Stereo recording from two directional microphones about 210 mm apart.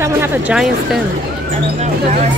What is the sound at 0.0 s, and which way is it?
Speech, 10° right (ahead or behind).